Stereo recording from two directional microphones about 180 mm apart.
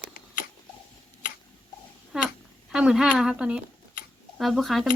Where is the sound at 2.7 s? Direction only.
5° right (ahead or behind).